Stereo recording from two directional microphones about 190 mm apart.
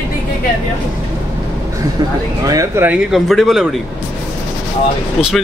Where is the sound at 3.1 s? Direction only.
Centre (ahead or behind).